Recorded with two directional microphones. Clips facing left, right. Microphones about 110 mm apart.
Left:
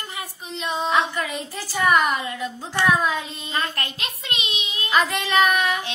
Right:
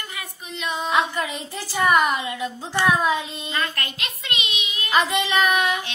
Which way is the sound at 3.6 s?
35° left (ahead or behind).